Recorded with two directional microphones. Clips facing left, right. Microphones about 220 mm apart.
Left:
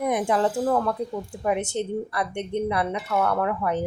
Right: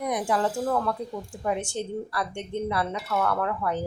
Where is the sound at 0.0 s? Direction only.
25° left (ahead or behind).